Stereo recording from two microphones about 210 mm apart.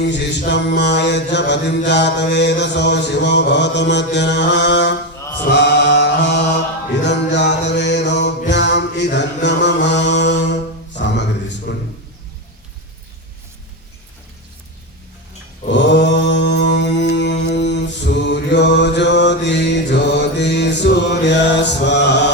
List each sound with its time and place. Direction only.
0.1 s mantra: 55° left (ahead or behind)
5.5 s music: 55° left (ahead or behind)
8.4 s mantra: 55° left (ahead or behind)
15.7 s mantra: 55° left (ahead or behind)